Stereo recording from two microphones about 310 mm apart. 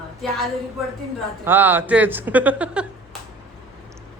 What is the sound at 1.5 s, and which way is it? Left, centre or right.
A man's voice, centre.